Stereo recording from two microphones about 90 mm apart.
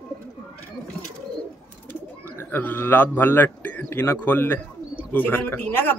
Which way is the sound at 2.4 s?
20° left (ahead or behind).